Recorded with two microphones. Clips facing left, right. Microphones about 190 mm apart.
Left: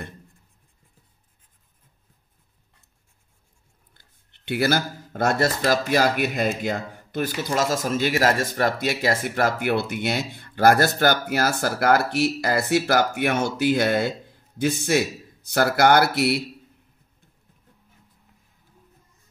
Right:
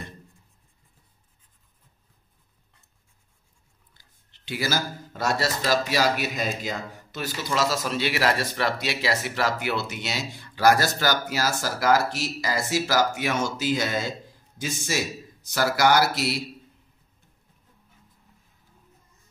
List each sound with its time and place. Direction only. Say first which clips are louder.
3.9 s speech: left 1 dB; 60° left (ahead or behind)